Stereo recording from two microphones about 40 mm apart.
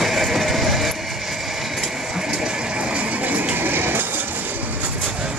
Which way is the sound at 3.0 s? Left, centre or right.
Right.